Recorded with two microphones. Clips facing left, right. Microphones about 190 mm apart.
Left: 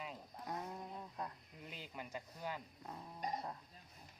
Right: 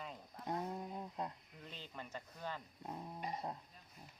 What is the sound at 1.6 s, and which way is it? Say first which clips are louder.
Speech: left 1 dB; 10° left (ahead or behind).